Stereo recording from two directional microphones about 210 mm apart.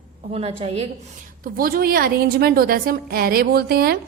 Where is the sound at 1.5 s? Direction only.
45° right (ahead or behind).